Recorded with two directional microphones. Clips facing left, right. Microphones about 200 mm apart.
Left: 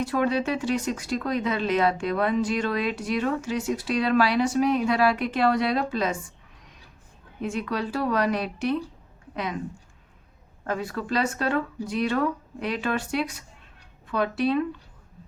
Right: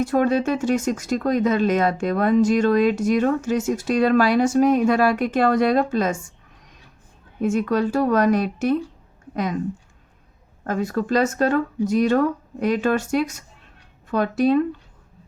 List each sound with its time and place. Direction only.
0.0 s speech: 45° right (ahead or behind)
7.4 s speech: 45° right (ahead or behind)
10.6 s speech: 45° right (ahead or behind)